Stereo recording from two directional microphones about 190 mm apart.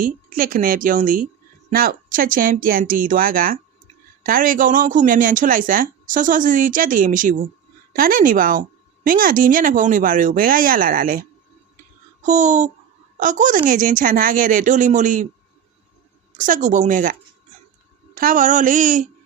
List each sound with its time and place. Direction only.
0.0 s a woman's voice: 50° right (ahead or behind)
16.4 s a woman's voice: 40° right (ahead or behind)